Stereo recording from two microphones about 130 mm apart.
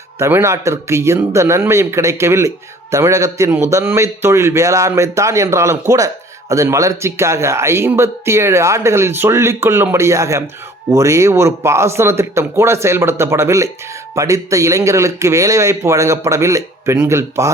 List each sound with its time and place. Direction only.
0.2 s speech: 20° right (ahead or behind)